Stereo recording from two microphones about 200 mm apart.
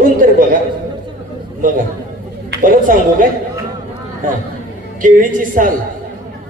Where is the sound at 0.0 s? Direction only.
45° right (ahead or behind).